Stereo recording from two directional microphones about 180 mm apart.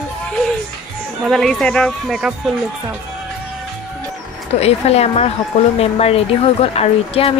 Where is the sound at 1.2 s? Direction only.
Centre (ahead or behind).